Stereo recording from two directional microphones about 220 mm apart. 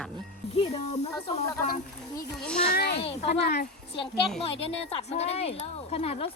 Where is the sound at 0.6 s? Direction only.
25° left (ahead or behind).